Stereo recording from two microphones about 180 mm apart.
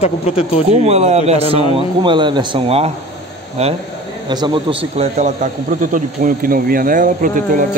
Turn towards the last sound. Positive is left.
turn(degrees=-50)  # may be behind; listen again after turning